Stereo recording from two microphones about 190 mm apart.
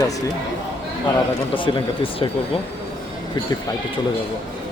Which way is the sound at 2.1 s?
30° left (ahead or behind).